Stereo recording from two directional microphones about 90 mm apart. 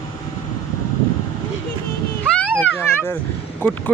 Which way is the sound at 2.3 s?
20° left (ahead or behind).